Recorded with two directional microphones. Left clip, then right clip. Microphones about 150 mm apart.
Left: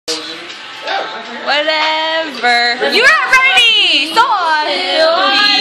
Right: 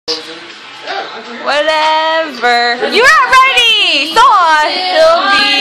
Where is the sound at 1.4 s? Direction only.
30° right (ahead or behind).